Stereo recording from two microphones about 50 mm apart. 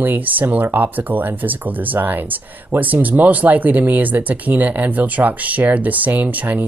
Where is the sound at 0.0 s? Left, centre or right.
Right.